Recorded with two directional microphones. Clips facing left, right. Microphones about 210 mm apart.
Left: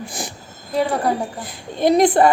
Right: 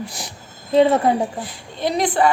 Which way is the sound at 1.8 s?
45° left (ahead or behind).